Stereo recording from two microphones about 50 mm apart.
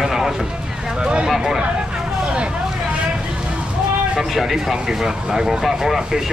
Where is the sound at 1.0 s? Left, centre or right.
Centre.